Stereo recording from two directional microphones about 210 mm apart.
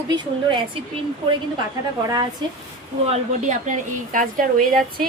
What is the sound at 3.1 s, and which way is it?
A woman's voice, 35° right (ahead or behind).